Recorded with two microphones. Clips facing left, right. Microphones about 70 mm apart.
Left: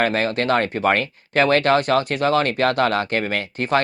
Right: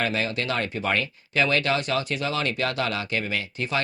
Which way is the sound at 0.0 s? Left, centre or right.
Left.